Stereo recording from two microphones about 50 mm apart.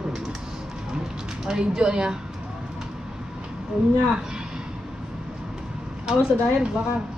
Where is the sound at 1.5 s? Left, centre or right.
Centre.